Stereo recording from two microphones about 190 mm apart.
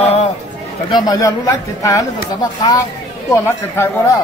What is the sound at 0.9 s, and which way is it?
A man's voice, 20° left (ahead or behind).